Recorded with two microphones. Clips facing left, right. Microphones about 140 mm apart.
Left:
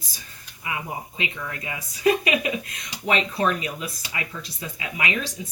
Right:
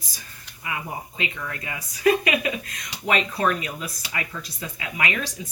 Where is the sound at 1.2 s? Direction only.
20° left (ahead or behind).